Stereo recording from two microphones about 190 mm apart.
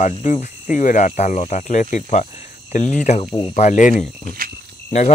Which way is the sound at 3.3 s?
25° left (ahead or behind).